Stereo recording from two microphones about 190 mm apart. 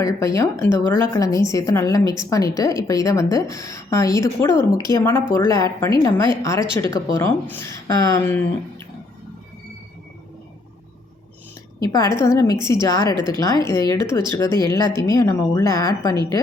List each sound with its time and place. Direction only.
0.2 s a woman's voice: 15° left (ahead or behind)
11.8 s a woman's voice: 20° left (ahead or behind)